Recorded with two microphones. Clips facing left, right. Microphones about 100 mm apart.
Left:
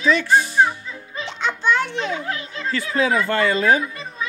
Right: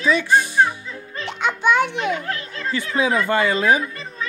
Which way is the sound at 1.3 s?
10° right (ahead or behind).